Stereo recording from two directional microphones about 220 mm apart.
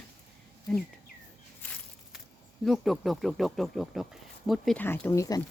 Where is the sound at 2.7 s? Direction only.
Centre (ahead or behind).